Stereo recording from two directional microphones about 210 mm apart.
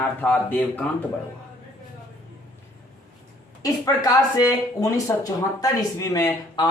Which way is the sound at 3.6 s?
15° left (ahead or behind).